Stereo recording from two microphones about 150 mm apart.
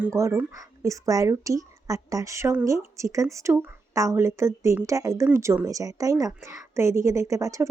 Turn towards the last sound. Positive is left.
turn(degrees=-20)  # may be behind; listen again after turning